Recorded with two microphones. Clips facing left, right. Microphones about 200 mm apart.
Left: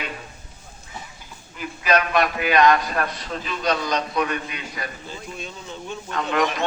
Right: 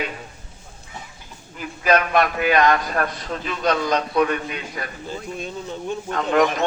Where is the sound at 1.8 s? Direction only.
50° right (ahead or behind).